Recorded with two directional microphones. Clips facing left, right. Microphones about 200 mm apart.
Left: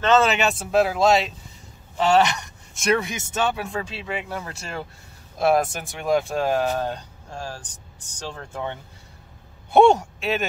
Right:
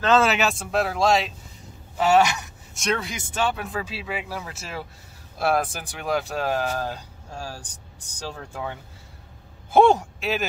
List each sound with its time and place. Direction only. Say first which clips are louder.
0.0 s speech: left 1 dB; 5° right (ahead or behind)
3.0 s speech: left 2 dB; 20° left (ahead or behind)
3.5 s speech: left 1 dB; 5° right (ahead or behind)